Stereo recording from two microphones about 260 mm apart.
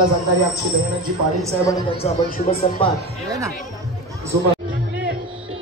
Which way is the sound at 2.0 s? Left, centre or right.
Left.